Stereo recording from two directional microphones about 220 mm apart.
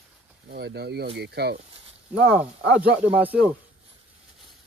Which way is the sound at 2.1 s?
5° right (ahead or behind).